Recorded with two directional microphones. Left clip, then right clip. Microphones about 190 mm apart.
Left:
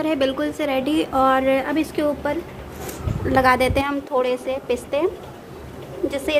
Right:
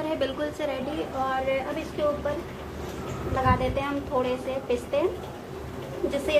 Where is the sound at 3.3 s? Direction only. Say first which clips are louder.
Left 8 dB; 55° left (ahead or behind).